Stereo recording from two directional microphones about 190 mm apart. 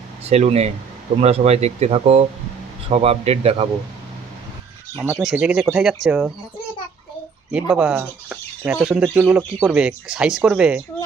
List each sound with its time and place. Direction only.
0.3 s speech: 35° right (ahead or behind)
5.1 s speech: 5° right (ahead or behind)
7.5 s speech: 5° right (ahead or behind)